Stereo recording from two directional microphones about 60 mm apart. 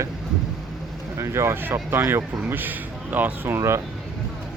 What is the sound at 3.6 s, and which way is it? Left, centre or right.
Speech, right.